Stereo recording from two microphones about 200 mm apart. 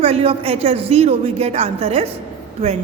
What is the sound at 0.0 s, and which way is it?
A woman's voice, 30° right (ahead or behind).